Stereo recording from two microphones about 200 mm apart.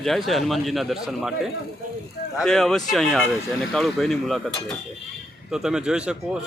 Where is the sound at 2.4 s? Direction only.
Centre (ahead or behind).